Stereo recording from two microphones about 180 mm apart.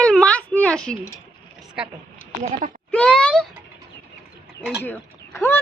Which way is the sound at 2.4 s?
40° right (ahead or behind).